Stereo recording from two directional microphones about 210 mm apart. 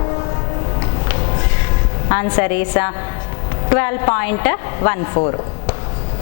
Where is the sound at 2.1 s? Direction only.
20° left (ahead or behind).